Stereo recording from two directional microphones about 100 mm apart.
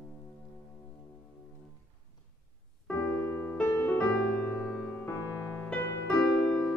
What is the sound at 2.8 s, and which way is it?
Music, 15° left (ahead or behind).